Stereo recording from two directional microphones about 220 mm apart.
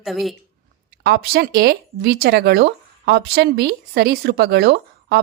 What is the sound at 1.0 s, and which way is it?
Speech, 45° right (ahead or behind).